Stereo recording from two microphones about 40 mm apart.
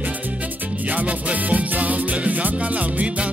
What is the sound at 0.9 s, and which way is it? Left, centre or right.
Music, right.